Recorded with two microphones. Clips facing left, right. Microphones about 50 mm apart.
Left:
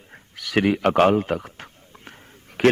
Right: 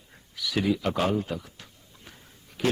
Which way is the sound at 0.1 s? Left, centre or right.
Left.